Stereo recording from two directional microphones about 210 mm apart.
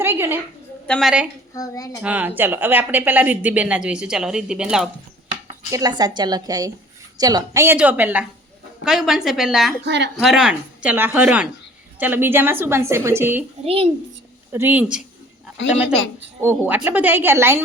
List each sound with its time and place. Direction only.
0.0 s a sound: 10° right (ahead or behind)
0.9 s speech: centre (ahead or behind)
1.5 s a child's voice: 15° left (ahead or behind)
2.0 s speech: 5° right (ahead or behind)
5.7 s a woman's voice: 20° right (ahead or behind); by 9.7 s centre (ahead or behind)
9.8 s speech: 55° right (ahead or behind)
10.2 s speech: centre (ahead or behind)
13.7 s a woman's voice: 25° right (ahead or behind)
14.5 s speech: 10° right (ahead or behind)
16.4 s speech: 10° right (ahead or behind)